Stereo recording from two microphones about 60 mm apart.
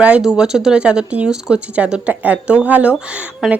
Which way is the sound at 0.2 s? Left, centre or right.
Centre.